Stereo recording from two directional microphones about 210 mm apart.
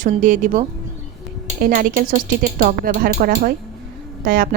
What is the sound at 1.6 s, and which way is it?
A woman's voice, 40° right (ahead or behind).